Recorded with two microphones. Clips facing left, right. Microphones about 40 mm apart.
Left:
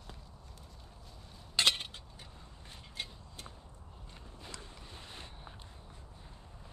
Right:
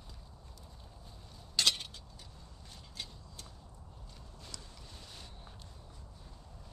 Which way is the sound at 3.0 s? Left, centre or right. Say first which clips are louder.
Left 3 dB; left.